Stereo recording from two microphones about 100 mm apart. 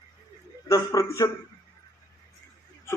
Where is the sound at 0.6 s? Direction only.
35° left (ahead or behind).